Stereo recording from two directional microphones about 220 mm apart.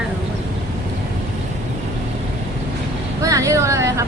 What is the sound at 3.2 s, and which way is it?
Vehicle, 15° right (ahead or behind).